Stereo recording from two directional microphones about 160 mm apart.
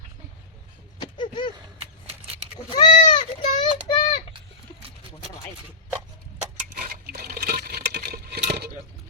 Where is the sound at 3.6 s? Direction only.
30° left (ahead or behind).